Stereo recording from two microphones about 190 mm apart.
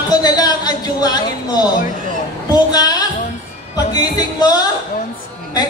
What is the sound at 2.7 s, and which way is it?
A woman's voice, 20° left (ahead or behind).